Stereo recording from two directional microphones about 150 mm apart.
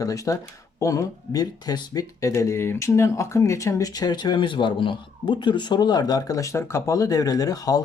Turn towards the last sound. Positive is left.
turn(degrees=25)  # may be behind; listen again after turning